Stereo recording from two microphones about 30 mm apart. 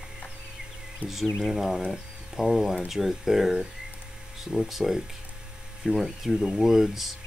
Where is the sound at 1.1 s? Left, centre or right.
Centre.